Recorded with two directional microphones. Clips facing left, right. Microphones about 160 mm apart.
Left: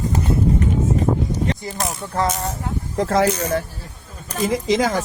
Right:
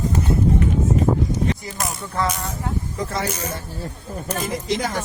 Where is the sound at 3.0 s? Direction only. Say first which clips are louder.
Left 10 dB; 90° left.